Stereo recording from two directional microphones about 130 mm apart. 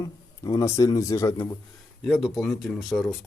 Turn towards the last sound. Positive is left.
turn(degrees=0)  # may be behind; listen again after turning